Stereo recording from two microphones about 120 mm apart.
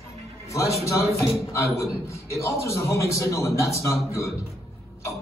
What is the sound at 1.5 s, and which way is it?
Speech, 25° left (ahead or behind).